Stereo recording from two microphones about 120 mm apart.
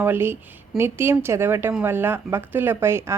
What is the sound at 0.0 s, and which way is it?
Speech, 20° right (ahead or behind).